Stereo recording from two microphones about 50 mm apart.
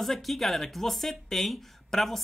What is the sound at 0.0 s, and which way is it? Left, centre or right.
Speech, centre.